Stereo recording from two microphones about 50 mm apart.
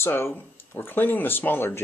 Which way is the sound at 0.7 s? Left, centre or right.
Left.